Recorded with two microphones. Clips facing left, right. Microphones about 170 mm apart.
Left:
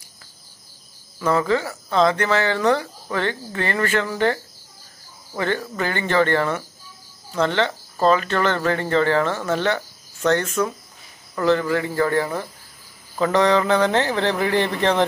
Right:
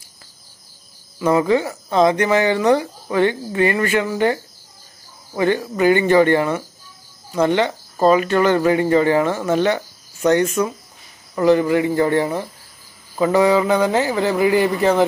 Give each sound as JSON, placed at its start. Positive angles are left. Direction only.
{"t": 1.2, "sound": "speech", "side_deg": -15}
{"t": 13.2, "sound": "speech", "side_deg": -10}